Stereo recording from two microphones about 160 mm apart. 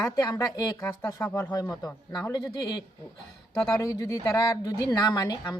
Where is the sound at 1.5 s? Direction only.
25° left (ahead or behind).